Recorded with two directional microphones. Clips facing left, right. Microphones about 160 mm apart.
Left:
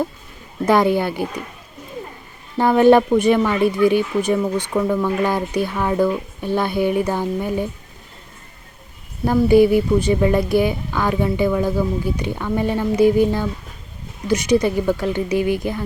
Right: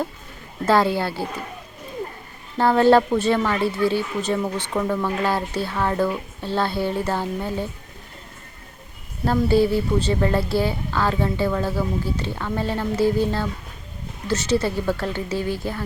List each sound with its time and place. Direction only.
0.6 s speech: 15° left (ahead or behind)
2.6 s speech: 15° left (ahead or behind)
9.2 s speech: 15° left (ahead or behind)